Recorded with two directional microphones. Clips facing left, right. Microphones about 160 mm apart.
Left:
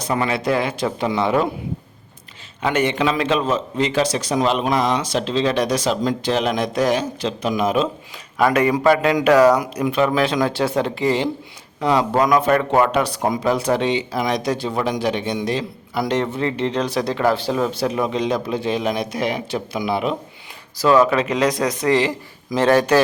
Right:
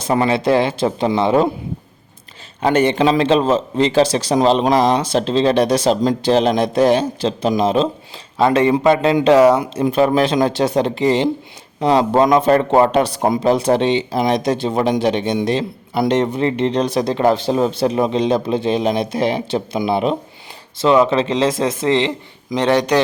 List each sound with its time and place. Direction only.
0.0 s speech: 30° right (ahead or behind)
2.6 s a man's voice: 35° right (ahead or behind)
9.9 s a man's voice: 35° right (ahead or behind)
10.2 s speech: 25° right (ahead or behind)